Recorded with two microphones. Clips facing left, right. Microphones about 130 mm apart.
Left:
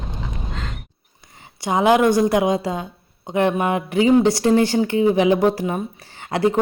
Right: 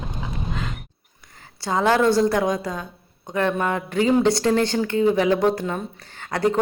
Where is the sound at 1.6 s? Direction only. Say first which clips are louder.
Left 3 dB; 15° left (ahead or behind).